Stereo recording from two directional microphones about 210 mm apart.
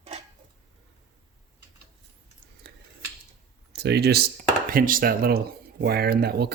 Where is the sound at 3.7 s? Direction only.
50° right (ahead or behind).